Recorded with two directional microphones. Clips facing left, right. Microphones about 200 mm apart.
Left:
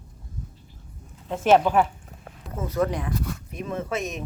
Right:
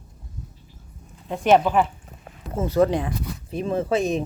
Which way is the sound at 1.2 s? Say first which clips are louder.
Right 1 dB; centre (ahead or behind).